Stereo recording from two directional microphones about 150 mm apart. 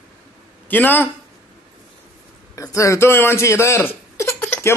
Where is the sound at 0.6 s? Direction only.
10° left (ahead or behind).